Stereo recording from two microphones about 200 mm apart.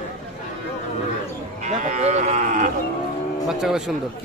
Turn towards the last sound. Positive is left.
turn(degrees=-5)  # may be behind; listen again after turning